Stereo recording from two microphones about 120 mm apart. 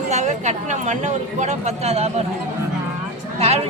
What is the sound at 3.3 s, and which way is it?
Speech, 60° right (ahead or behind).